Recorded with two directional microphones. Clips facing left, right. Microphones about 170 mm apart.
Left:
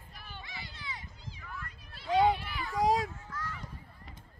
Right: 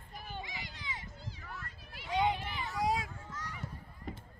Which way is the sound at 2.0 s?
20° right (ahead or behind).